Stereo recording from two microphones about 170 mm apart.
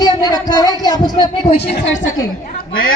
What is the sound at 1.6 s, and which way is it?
Speech, 85° left.